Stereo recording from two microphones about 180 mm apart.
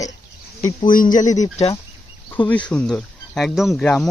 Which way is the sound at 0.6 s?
25° left (ahead or behind).